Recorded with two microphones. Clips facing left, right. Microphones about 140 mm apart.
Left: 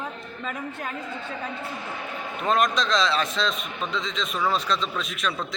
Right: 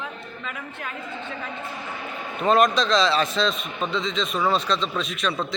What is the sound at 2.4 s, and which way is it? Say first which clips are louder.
Speech: right 4 dB; centre (ahead or behind).